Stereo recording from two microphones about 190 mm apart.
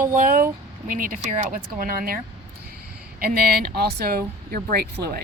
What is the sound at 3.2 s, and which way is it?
Speech, 55° right (ahead or behind).